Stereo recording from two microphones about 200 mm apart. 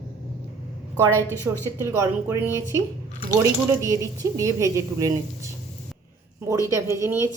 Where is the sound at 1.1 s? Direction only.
10° left (ahead or behind).